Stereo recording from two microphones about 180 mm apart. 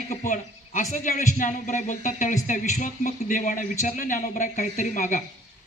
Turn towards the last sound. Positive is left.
turn(degrees=45)  # may be behind; listen again after turning